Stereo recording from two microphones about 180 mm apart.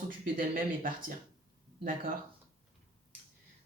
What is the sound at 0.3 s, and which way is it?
Speech, 50° right (ahead or behind).